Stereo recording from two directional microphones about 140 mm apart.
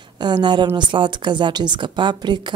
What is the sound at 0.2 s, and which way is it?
Speech, 30° right (ahead or behind).